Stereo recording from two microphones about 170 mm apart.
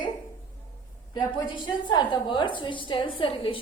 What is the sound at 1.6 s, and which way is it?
A woman's voice, 25° left (ahead or behind).